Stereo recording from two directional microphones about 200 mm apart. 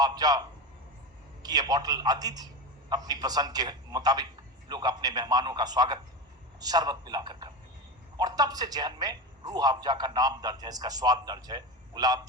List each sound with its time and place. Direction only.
0.0 s a man's voice: 20° right (ahead or behind)